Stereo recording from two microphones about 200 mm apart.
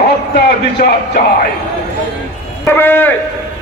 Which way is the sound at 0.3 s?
55° left (ahead or behind).